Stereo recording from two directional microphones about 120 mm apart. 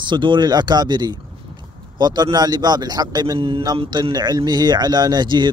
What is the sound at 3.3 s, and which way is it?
Speech, 50° right (ahead or behind).